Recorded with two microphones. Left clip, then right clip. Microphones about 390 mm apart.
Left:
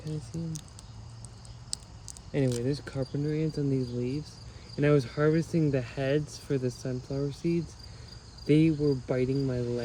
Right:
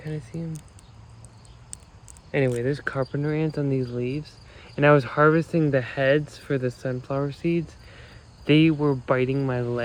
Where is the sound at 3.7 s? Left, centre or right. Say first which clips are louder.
Right 5 dB; right.